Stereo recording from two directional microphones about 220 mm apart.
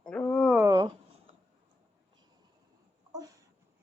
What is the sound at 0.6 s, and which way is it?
Speech, 20° right (ahead or behind).